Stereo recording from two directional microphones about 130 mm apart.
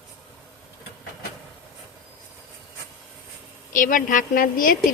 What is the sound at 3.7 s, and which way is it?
A woman's voice, 90° left.